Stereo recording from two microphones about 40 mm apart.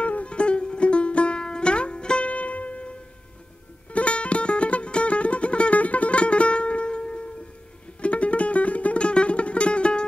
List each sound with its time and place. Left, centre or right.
0.0 s music: left
2.2 s music: left
3.9 s music: left